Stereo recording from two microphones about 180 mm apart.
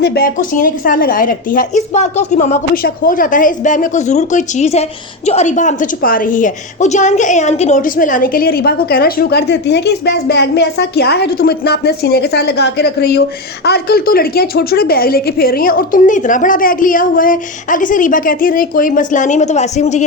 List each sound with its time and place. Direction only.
0.0 s a woman's voice: 60° left (ahead or behind); by 20.1 s 40° left (ahead or behind)